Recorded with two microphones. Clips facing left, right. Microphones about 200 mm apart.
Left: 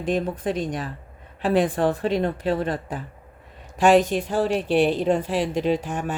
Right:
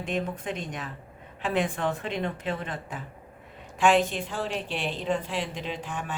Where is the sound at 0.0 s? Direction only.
35° left (ahead or behind).